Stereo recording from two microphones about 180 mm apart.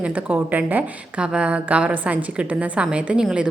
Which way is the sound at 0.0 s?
10° right (ahead or behind).